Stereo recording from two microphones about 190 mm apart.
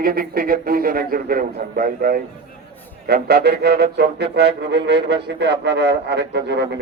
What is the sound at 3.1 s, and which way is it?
Music, 60° right (ahead or behind).